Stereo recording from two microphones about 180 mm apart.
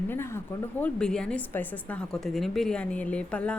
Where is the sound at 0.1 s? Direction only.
15° left (ahead or behind).